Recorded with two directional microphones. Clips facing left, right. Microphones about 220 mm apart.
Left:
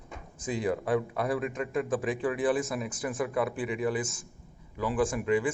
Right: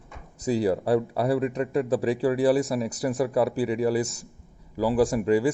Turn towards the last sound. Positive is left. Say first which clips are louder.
# right 5 dB
turn(degrees=-40)  # may be behind; listen again after turning